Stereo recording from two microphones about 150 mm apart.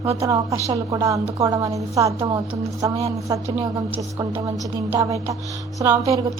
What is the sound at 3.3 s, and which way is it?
Music, 20° right (ahead or behind).